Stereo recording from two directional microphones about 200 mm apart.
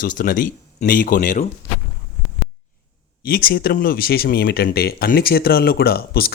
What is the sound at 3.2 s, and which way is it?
Speech, 45° left (ahead or behind).